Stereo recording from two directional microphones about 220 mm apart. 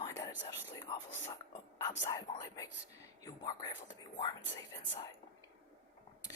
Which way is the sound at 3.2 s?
15° left (ahead or behind).